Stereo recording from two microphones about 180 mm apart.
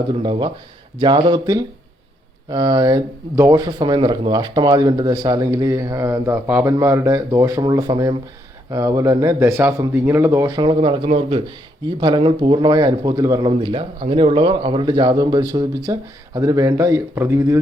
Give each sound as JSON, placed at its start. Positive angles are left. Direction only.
{"t": 0.1, "sound": "speech", "side_deg": -25}